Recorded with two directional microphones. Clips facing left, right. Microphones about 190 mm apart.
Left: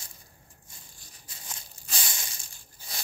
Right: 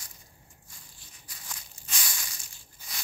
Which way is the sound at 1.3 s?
25° left (ahead or behind).